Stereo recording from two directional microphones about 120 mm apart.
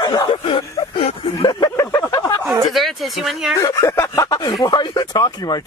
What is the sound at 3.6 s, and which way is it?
Speech, 25° left (ahead or behind).